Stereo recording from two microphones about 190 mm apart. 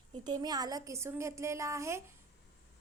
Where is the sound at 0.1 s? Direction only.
20° right (ahead or behind).